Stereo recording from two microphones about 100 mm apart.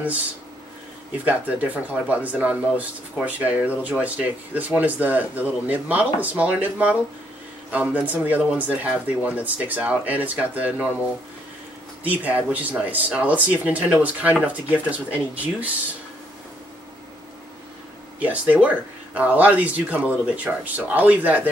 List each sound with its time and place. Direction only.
1.1 s speech: 15° right (ahead or behind)
12.0 s speech: 15° right (ahead or behind)
18.2 s speech: 15° right (ahead or behind)